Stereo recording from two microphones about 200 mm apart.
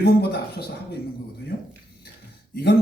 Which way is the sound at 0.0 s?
50° left (ahead or behind).